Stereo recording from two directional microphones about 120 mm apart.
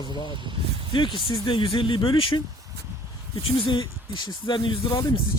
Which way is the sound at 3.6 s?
45° left (ahead or behind).